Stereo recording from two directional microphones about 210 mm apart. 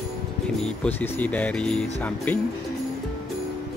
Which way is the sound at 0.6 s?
5° left (ahead or behind).